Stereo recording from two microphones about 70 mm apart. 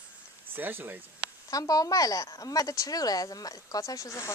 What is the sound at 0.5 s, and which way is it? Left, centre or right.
Speech, right.